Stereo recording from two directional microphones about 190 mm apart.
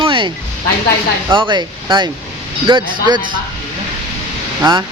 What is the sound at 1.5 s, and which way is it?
Speech, 25° right (ahead or behind).